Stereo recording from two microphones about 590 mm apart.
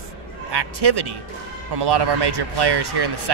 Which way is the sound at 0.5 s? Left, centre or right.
Right.